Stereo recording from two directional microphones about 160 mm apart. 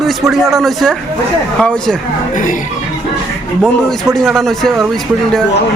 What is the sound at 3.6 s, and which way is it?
A man's voice, centre (ahead or behind).